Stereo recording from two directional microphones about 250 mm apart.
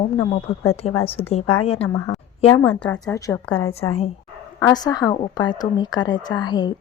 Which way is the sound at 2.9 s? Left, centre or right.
Centre.